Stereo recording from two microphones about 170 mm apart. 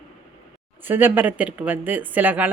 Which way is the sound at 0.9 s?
10° right (ahead or behind).